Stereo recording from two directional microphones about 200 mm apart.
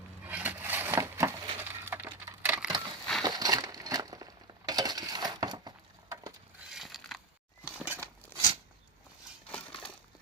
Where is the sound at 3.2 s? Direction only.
20° right (ahead or behind).